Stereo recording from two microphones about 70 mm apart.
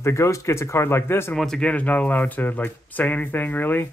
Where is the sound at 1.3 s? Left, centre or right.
Centre.